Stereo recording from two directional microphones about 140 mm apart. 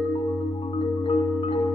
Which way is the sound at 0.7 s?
40° left (ahead or behind).